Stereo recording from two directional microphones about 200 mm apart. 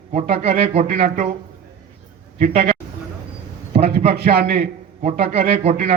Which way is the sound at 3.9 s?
50° right (ahead or behind).